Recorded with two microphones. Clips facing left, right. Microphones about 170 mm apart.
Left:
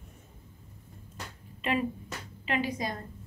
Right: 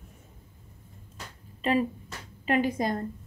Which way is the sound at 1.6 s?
35° right (ahead or behind).